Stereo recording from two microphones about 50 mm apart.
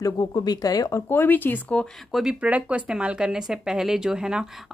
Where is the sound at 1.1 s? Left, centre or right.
Left.